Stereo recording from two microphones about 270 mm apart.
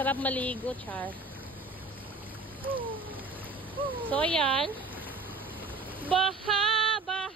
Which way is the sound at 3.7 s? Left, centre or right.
Centre.